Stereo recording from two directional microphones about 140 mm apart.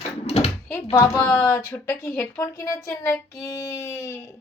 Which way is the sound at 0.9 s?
25° left (ahead or behind).